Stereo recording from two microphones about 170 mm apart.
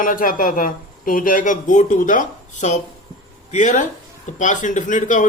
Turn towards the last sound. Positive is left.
turn(degrees=45)  # may be behind; listen again after turning